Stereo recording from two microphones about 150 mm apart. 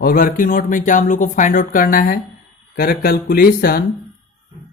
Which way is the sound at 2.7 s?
85° left.